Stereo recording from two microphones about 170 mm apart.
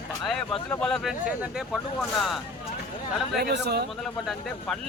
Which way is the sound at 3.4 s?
75° right (ahead or behind).